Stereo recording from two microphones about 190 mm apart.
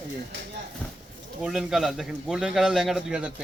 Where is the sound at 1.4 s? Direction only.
Centre (ahead or behind).